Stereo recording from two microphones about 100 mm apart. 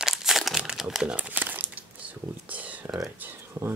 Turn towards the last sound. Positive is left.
turn(degrees=-15)  # may be behind; listen again after turning